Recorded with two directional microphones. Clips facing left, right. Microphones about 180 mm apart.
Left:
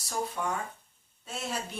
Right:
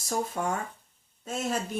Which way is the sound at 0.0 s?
45° right (ahead or behind).